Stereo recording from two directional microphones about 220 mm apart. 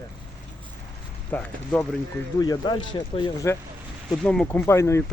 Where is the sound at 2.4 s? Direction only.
20° left (ahead or behind).